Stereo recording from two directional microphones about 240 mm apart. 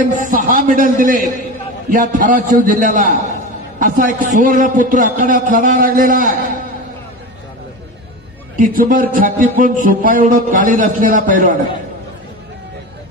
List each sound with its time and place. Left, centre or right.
0.0 s a man's voice: right
8.5 s a man's voice: right